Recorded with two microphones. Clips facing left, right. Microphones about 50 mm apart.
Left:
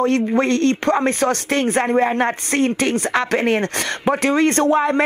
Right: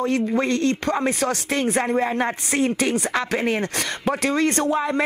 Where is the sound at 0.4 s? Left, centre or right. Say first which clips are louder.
Left 4 dB; left.